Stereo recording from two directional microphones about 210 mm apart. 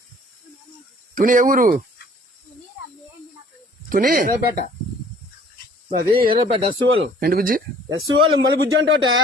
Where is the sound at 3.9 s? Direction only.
40° right (ahead or behind).